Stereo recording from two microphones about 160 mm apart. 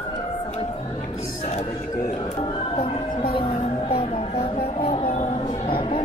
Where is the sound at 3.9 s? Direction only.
35° left (ahead or behind).